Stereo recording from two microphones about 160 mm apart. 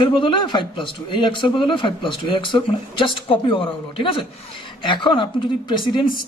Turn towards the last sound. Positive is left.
turn(degrees=30)  # may be behind; listen again after turning